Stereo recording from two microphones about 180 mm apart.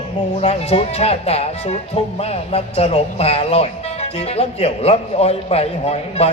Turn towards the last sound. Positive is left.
turn(degrees=35)  # may be behind; listen again after turning